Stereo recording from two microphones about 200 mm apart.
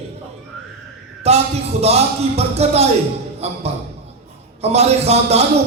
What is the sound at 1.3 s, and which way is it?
Speech, 30° right (ahead or behind).